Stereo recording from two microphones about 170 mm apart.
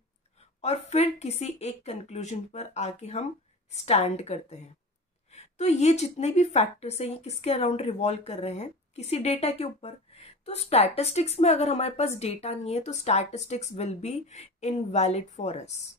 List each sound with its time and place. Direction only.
0.6 s a woman's voice: 40° left (ahead or behind)